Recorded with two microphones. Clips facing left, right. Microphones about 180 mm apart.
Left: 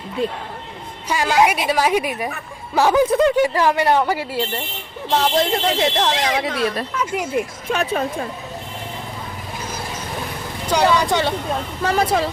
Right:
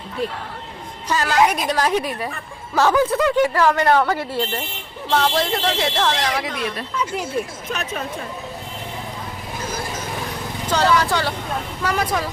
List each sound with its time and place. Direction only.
1.0 s a woman's voice: 15° left (ahead or behind)
7.7 s speech: 30° left (ahead or behind)
10.7 s a woman's voice: 15° left (ahead or behind)